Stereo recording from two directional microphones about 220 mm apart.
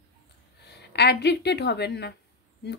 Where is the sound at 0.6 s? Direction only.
50° left (ahead or behind).